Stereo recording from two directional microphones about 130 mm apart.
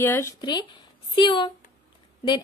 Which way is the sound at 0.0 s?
15° left (ahead or behind).